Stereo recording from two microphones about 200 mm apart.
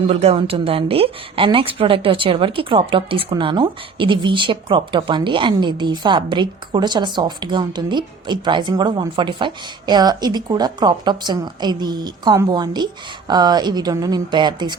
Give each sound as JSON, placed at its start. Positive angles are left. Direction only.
{"t": 0.1, "sound": "a woman's voice", "side_deg": -30}